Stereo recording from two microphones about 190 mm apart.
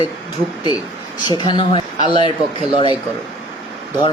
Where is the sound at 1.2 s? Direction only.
25° left (ahead or behind).